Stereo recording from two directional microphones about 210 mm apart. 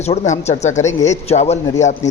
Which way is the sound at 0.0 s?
30° left (ahead or behind).